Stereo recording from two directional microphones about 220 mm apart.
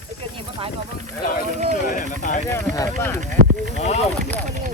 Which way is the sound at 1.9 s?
35° left (ahead or behind).